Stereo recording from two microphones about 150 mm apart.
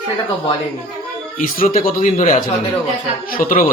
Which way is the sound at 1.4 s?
70° left (ahead or behind).